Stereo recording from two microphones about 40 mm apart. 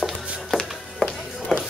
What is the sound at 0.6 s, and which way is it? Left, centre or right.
Music, centre.